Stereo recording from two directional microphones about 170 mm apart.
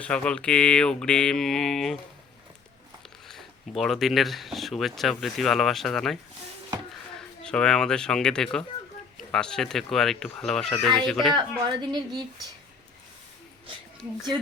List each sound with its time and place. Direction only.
0.0 s speech: 5° left (ahead or behind)
3.2 s speech: centre (ahead or behind)
7.2 s speech: 5° left (ahead or behind)
11.3 s a woman's voice: 25° right (ahead or behind)